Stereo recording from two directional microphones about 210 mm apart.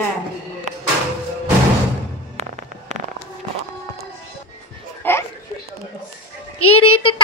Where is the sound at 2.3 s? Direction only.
35° right (ahead or behind).